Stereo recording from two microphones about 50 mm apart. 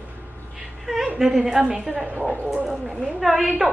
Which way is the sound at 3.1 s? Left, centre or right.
Centre.